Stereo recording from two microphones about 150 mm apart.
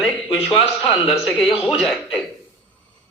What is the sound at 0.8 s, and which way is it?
A man's voice, centre (ahead or behind).